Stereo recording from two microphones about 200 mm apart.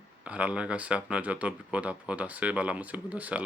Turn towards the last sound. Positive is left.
turn(degrees=-5)  # may be behind; listen again after turning